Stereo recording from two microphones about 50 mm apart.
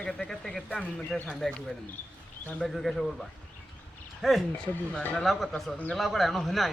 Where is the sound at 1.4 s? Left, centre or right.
Centre.